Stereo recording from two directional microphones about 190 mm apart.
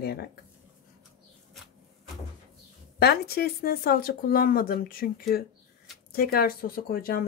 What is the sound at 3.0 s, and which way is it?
Speech, 55° left (ahead or behind).